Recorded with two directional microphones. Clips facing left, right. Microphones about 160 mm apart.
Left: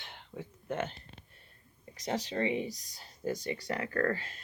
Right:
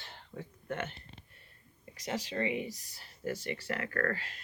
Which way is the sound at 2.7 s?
15° left (ahead or behind).